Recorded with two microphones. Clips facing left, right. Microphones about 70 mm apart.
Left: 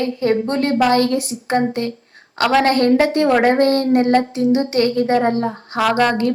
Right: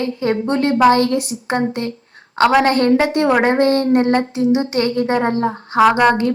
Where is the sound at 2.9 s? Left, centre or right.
Right.